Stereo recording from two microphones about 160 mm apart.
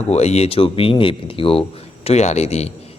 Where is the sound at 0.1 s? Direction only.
40° left (ahead or behind).